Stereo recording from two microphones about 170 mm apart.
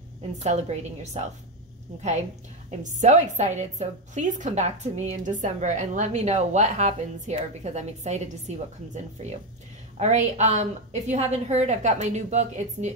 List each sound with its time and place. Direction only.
0.4 s a woman's voice: 40° right (ahead or behind)
2.8 s a woman's voice: 45° right (ahead or behind)